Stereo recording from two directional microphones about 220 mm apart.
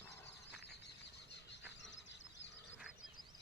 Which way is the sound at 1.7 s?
55° left (ahead or behind).